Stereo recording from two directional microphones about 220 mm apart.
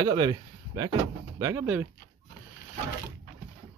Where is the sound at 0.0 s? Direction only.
20° right (ahead or behind).